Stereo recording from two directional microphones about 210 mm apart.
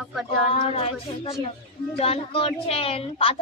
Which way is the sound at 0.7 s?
25° left (ahead or behind).